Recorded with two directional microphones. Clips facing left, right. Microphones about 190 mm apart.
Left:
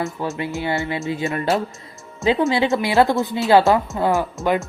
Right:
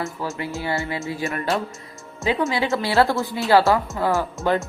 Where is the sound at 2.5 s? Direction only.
20° left (ahead or behind).